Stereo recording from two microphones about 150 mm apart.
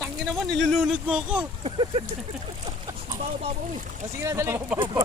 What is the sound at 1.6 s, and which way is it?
Speech, 40° right (ahead or behind).